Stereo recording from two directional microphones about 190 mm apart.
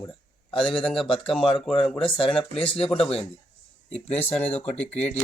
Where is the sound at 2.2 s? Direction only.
30° left (ahead or behind).